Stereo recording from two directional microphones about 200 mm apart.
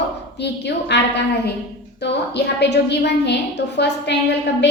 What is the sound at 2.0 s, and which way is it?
A woman's voice, 55° left (ahead or behind).